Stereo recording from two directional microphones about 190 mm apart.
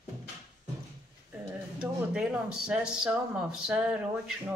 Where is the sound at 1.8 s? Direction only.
5° right (ahead or behind).